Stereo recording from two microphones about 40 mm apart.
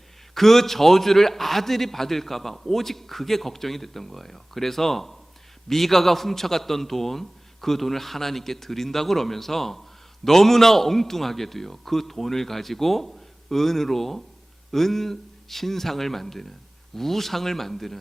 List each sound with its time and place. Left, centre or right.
0.3 s a man's voice: centre